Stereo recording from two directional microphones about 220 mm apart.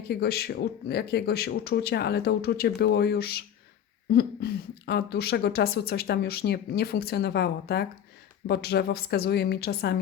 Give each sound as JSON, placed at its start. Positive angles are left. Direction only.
{"t": 0.1, "sound": "a woman's voice", "side_deg": 45}